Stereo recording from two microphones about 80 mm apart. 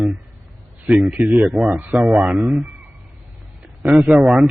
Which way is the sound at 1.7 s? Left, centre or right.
Right.